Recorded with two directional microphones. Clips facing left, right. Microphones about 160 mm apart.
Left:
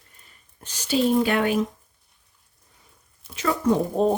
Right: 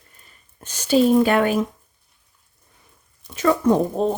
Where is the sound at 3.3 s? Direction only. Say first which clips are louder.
Right 5 dB; 50° right (ahead or behind).